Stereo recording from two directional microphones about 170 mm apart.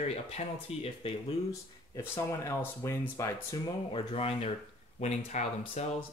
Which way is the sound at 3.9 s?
35° left (ahead or behind).